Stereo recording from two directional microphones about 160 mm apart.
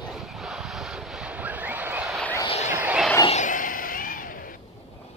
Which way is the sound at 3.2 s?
50° left (ahead or behind).